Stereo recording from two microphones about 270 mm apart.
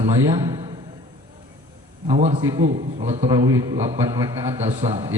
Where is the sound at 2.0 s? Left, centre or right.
Right.